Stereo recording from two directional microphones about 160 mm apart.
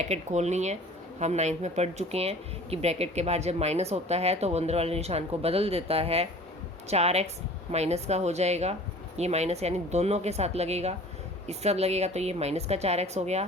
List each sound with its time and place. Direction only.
0.0 s a woman's voice: 45° right (ahead or behind)